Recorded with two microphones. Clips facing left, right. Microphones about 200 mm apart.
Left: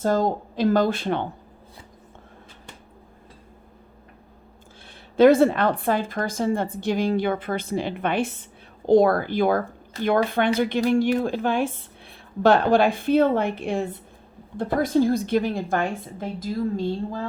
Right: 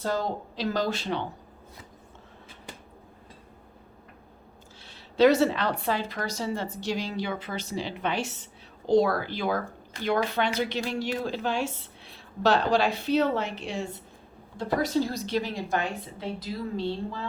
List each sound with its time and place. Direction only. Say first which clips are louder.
0.0 s a woman's voice: left 7 dB; 50° left (ahead or behind)
5.1 s a woman's voice: left 5 dB; 50° left (ahead or behind)